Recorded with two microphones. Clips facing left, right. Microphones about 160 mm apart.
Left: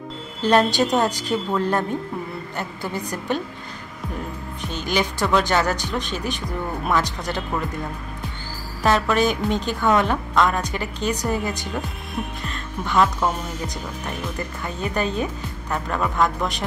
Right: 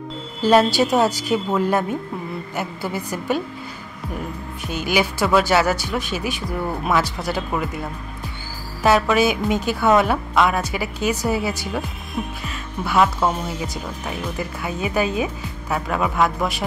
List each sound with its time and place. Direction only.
0.4 s speech: 5° right (ahead or behind)
4.6 s speech: 10° right (ahead or behind)
8.8 s speech: 5° right (ahead or behind)